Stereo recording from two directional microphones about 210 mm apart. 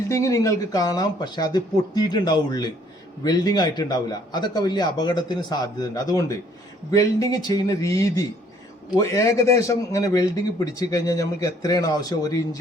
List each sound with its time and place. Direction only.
0.1 s a man's voice: 15° left (ahead or behind)